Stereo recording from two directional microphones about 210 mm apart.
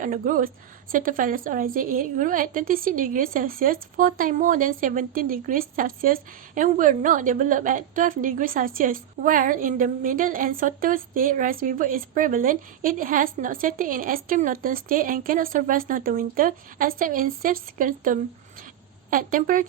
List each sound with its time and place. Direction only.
0.0 s a woman's voice: 40° right (ahead or behind)